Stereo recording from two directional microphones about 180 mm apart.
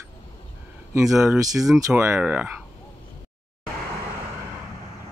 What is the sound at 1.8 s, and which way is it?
Speech, 15° right (ahead or behind).